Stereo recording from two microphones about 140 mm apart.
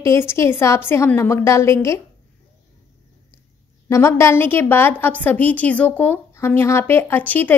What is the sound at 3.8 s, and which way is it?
A woman's voice, 20° left (ahead or behind).